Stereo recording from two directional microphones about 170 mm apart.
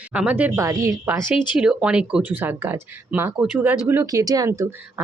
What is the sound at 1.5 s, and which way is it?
Speech, 5° right (ahead or behind).